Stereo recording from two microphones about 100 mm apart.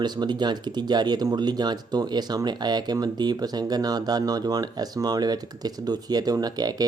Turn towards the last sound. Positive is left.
turn(degrees=-40)  # may be behind; listen again after turning